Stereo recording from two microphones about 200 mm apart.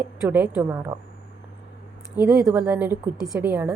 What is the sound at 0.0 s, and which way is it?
Speech, 10° right (ahead or behind).